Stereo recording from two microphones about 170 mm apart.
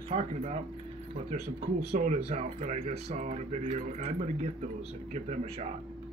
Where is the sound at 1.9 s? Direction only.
50° right (ahead or behind).